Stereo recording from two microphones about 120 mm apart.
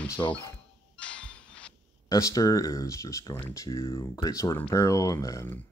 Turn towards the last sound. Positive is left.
turn(degrees=25)  # may be behind; listen again after turning